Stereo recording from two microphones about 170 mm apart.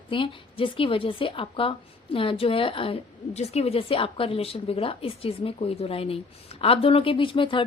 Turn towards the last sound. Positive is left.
turn(degrees=30)  # may be behind; listen again after turning